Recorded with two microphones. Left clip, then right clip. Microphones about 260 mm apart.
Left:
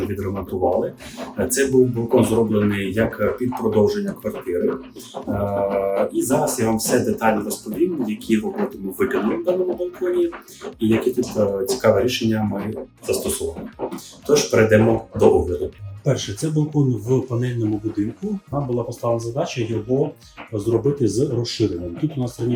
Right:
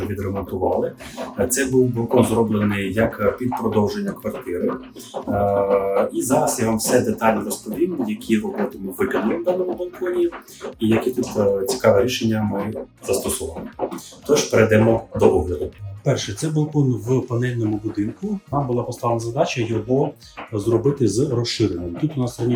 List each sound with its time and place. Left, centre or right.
0.1 s speech: centre
22.0 s speech: centre